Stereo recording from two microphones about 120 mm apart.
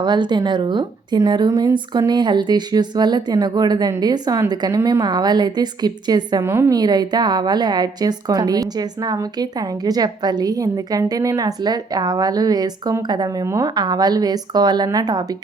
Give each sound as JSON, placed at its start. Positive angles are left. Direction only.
{"t": 0.0, "sound": "a woman's voice", "side_deg": -40}
{"t": 6.4, "sound": "a woman's voice", "side_deg": -20}
{"t": 6.7, "sound": "a woman's voice", "side_deg": -35}